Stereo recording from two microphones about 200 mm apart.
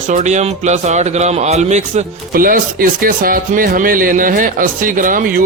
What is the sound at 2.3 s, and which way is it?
Speech, 45° right (ahead or behind).